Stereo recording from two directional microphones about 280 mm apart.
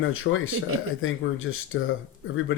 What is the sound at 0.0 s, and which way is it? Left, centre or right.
Speech, left.